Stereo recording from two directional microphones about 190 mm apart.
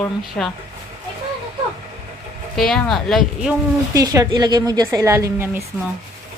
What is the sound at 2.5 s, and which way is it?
A woman's voice, centre (ahead or behind).